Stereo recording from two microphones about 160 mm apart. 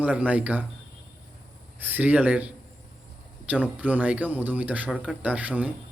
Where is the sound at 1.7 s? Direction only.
10° right (ahead or behind).